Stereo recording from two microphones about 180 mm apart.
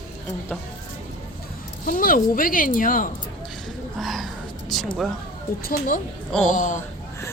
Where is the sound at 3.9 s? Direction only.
Centre (ahead or behind).